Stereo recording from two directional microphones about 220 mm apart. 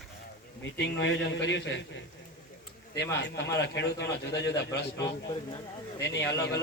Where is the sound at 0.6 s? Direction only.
50° left (ahead or behind).